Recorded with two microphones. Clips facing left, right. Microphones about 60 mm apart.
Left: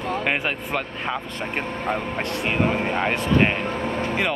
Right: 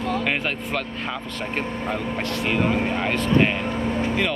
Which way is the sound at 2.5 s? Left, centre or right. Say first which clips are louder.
Even; left.